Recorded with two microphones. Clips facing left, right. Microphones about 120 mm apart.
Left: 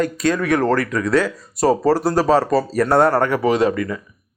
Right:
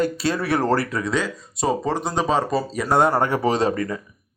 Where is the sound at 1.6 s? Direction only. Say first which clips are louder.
Left 7 dB; 5° left (ahead or behind).